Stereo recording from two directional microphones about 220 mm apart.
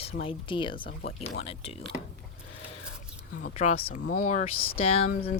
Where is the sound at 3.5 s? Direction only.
30° left (ahead or behind).